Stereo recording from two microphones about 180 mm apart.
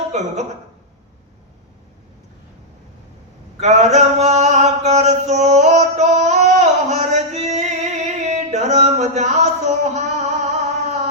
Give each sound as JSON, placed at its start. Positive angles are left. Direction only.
{"t": 0.1, "sound": "speech", "side_deg": -40}
{"t": 3.6, "sound": "mantra", "side_deg": -40}